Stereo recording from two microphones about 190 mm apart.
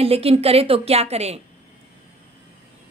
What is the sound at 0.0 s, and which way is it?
A woman's voice, 30° right (ahead or behind).